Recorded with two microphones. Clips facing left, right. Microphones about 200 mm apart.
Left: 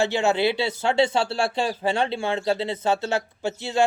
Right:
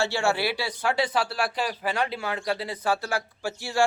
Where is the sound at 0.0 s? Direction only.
20° left (ahead or behind).